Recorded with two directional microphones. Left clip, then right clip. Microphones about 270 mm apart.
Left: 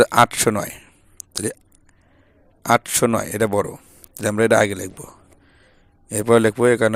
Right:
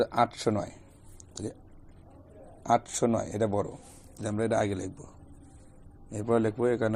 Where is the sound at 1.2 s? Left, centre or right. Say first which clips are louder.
Left 12 dB; left.